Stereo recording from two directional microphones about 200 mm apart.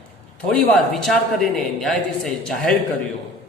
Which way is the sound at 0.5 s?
5° left (ahead or behind).